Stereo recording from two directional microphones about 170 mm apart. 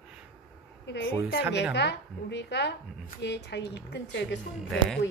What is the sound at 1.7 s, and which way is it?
Speech, 90° left.